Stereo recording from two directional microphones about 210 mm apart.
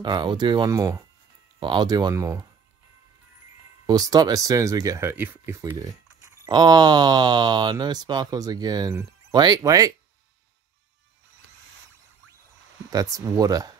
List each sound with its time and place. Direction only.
0.0 s speech: 20° right (ahead or behind)
3.8 s speech: 20° right (ahead or behind)
12.9 s speech: 15° right (ahead or behind)